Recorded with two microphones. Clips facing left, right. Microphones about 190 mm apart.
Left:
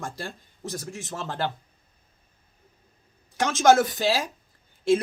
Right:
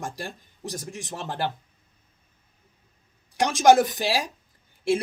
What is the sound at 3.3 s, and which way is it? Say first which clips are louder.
Speech: right 1 dB; 15° right (ahead or behind).